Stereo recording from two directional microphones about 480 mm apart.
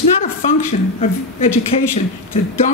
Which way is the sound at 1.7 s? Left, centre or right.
Centre.